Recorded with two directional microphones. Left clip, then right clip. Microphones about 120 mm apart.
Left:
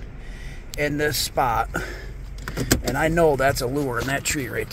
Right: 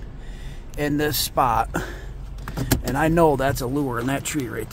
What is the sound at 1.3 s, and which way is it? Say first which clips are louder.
Speech: right 2 dB; 35° right (ahead or behind).